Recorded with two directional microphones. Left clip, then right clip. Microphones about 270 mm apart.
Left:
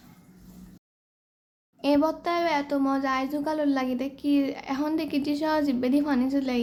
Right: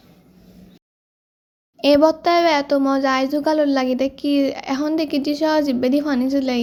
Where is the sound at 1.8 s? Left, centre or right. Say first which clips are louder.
Right 10 dB; centre.